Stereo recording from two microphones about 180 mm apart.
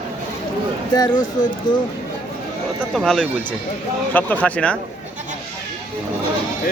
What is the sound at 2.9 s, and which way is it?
A man's voice, 5° left (ahead or behind).